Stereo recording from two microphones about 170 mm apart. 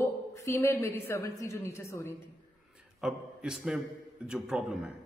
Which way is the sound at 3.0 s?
5° right (ahead or behind).